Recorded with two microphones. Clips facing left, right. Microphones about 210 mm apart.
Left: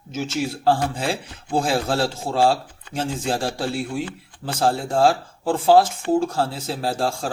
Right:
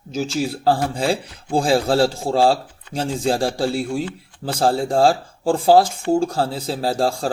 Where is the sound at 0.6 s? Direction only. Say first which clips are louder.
Right 2 dB; 35° right (ahead or behind).